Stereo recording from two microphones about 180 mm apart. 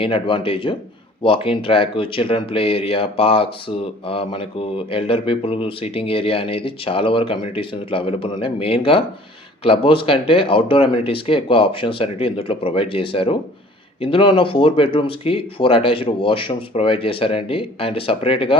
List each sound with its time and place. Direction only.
0.0 s speech: 30° left (ahead or behind)